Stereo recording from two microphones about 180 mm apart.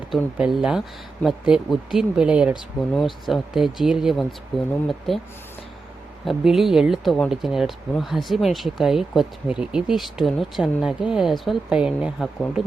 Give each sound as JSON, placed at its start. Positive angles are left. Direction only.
{"t": 0.1, "sound": "speech", "side_deg": 0}
{"t": 6.2, "sound": "speech", "side_deg": 0}